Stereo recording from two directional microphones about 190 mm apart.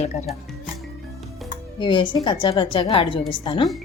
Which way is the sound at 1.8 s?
25° left (ahead or behind).